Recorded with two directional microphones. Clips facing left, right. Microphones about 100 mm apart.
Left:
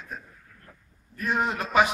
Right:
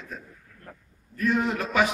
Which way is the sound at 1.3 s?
35° left (ahead or behind).